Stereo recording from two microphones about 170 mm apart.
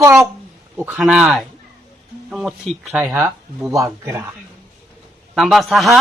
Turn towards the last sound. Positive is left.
turn(degrees=0)  # may be behind; listen again after turning